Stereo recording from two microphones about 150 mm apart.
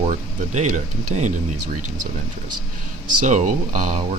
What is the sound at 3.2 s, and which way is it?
Speech, 55° right (ahead or behind).